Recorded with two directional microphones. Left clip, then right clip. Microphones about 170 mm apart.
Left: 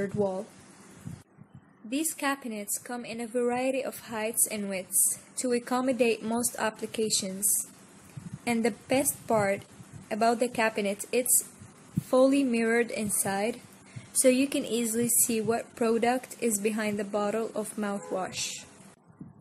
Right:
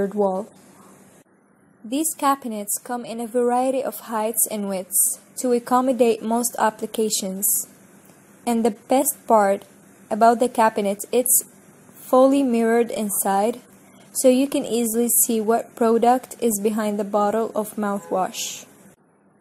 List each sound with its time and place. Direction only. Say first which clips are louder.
0.2 s a woman's voice: right 8 dB; 10° right (ahead or behind)
1.9 s a woman's voice: right 9 dB; 15° right (ahead or behind)
6.2 s a woman's voice: right 8 dB; 5° left (ahead or behind)
6.5 s a woman's voice: right 10 dB; 15° right (ahead or behind)
8.5 s a woman's voice: right 7 dB; 15° right (ahead or behind)